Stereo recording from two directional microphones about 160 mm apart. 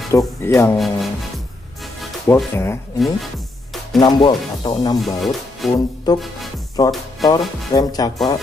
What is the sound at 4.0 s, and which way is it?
Speech, 30° left (ahead or behind).